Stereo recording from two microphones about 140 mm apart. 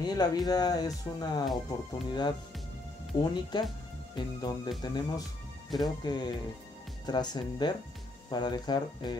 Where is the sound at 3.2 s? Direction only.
30° left (ahead or behind).